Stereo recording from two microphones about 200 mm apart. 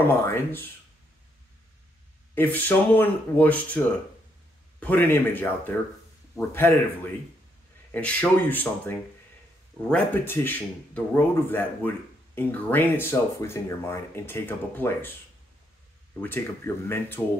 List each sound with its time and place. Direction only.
0.2 s speech: 10° left (ahead or behind)
2.3 s speech: 10° left (ahead or behind)
7.9 s speech: 10° left (ahead or behind)
16.2 s speech: 10° left (ahead or behind)